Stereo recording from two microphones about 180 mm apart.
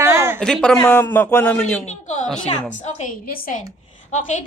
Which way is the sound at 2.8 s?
50° left (ahead or behind).